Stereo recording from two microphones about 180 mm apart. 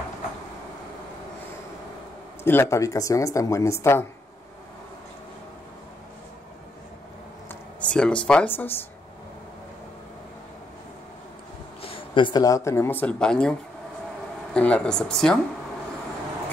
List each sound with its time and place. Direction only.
2.4 s speech: 15° left (ahead or behind)
7.4 s a sound: 5° left (ahead or behind)
8.3 s speech: 10° left (ahead or behind)
11.8 s speech: 30° left (ahead or behind); by 15.3 s 5° left (ahead or behind)